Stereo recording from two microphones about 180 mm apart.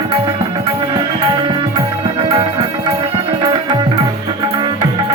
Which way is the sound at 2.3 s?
30° right (ahead or behind).